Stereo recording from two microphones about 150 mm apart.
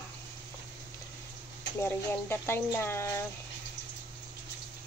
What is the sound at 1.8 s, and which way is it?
Speech, 15° left (ahead or behind).